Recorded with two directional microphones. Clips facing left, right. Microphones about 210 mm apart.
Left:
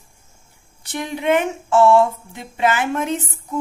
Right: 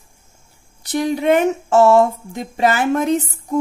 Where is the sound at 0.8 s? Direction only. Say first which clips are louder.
Right 5 dB; 40° right (ahead or behind).